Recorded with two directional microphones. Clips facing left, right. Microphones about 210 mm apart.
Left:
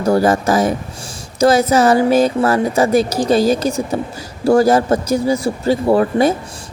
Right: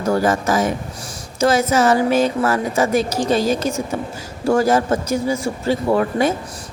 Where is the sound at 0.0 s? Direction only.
35° left (ahead or behind).